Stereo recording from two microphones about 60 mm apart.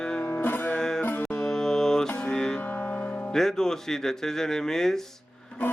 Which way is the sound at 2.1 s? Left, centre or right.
Centre.